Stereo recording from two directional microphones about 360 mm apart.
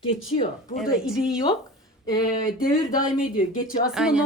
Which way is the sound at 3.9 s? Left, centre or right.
Centre.